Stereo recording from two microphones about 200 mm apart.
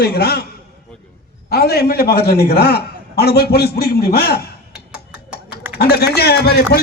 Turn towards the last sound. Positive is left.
turn(degrees=55)  # may be behind; listen again after turning